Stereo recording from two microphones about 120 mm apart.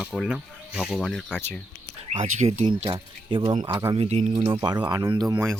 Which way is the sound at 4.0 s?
60° right (ahead or behind).